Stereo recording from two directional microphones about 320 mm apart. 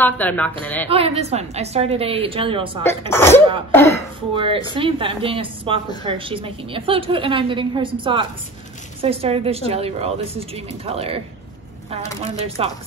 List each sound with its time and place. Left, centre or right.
0.0 s a man's voice: centre
0.8 s a woman's voice: centre
3.1 s speech: centre
4.4 s a woman's voice: centre
12.4 s a woman's voice: centre